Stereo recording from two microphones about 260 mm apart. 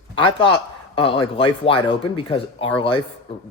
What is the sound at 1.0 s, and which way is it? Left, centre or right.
Speech, centre.